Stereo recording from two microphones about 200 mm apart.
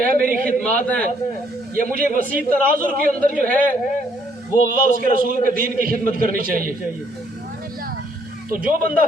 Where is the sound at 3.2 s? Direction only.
5° left (ahead or behind).